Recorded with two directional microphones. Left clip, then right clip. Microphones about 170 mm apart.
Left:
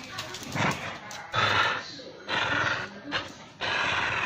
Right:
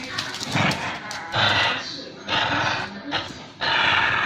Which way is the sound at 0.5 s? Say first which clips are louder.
Right 5 dB; 15° right (ahead or behind).